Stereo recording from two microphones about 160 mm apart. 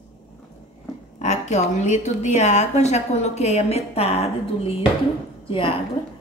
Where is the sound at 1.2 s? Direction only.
45° left (ahead or behind).